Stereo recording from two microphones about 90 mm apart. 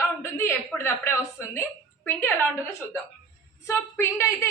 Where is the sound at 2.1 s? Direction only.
25° left (ahead or behind).